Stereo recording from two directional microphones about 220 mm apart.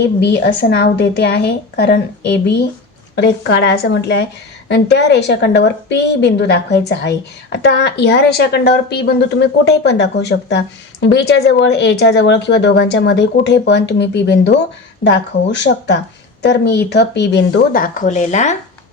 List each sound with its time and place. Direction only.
0.0 s speech: 50° left (ahead or behind); by 18.5 s 30° left (ahead or behind)